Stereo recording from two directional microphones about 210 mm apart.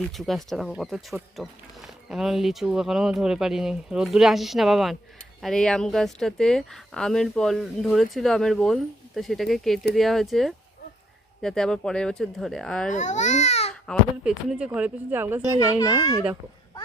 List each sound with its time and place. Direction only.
0.0 s speech: centre (ahead or behind)
12.9 s speech: 35° left (ahead or behind)
13.8 s speech: 5° right (ahead or behind)
15.8 s a child's voice: 15° left (ahead or behind)